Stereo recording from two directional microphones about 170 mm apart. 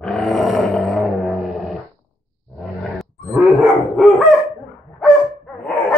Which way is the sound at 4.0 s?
Centre (ahead or behind).